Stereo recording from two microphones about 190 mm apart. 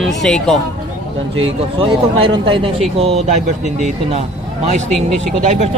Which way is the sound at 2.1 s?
30° right (ahead or behind).